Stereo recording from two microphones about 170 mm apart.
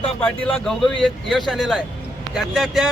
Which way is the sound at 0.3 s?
5° left (ahead or behind).